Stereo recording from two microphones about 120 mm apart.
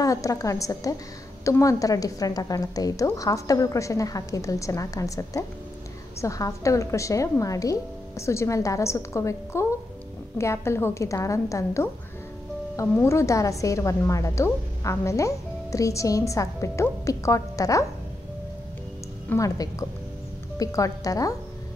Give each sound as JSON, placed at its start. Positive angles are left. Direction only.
{"t": 0.0, "sound": "a woman's voice", "side_deg": 30}
{"t": 12.9, "sound": "a woman's voice", "side_deg": 25}
{"t": 19.2, "sound": "a woman's voice", "side_deg": 25}